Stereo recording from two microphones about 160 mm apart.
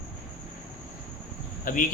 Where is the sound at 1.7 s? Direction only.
60° left (ahead or behind).